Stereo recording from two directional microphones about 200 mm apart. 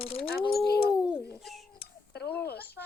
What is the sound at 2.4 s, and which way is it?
Speech, 55° left (ahead or behind).